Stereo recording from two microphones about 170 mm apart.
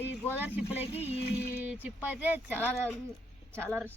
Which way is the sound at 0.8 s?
35° left (ahead or behind).